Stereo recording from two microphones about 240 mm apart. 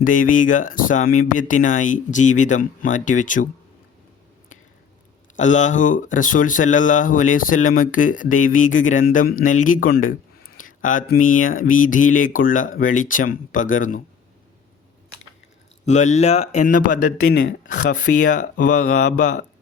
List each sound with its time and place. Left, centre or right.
0.0 s speech: left
5.4 s speech: left
15.9 s speech: left